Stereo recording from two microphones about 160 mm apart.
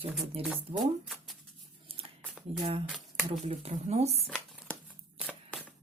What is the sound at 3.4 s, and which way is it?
Speech, 35° right (ahead or behind).